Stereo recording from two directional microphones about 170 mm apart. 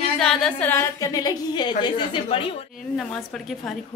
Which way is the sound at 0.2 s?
Centre (ahead or behind).